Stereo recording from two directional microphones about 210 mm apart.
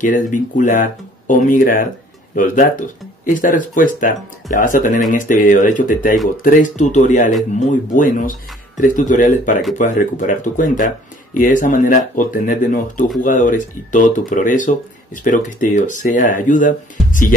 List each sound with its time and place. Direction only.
0.0 s speech: 40° left (ahead or behind)